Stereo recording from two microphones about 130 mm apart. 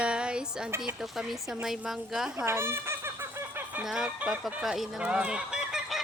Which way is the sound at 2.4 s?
20° right (ahead or behind).